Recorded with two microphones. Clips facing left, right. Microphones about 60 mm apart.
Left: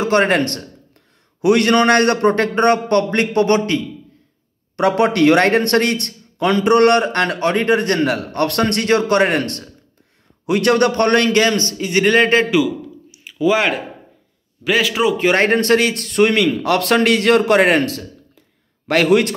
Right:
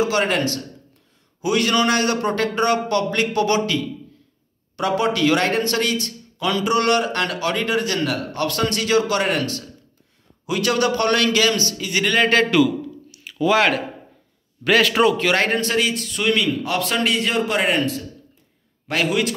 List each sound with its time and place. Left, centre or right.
0.0 s a man's voice: left
4.7 s a man's voice: left
12.4 s a sound: centre
14.6 s a man's voice: centre
15.1 s a man's voice: left
15.6 s a man's voice: left